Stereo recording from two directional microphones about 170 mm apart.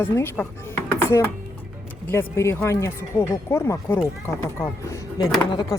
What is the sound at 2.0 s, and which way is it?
A woman's voice, 15° left (ahead or behind).